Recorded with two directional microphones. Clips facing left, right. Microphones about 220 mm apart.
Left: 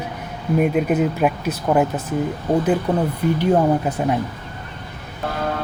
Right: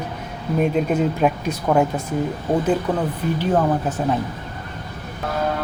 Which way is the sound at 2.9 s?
20° left (ahead or behind).